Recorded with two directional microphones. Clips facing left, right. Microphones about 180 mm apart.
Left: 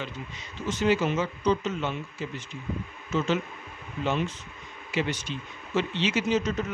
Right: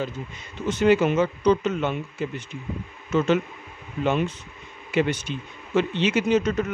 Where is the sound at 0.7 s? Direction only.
60° right (ahead or behind).